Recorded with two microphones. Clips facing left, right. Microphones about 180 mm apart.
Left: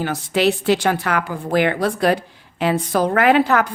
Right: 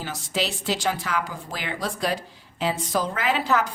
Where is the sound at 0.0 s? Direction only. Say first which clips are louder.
Left 10 dB; 60° left (ahead or behind).